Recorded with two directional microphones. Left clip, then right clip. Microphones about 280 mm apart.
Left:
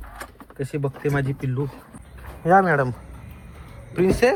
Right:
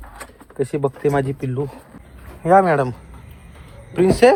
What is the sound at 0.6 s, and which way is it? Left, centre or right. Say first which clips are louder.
Speech: right 7 dB; centre.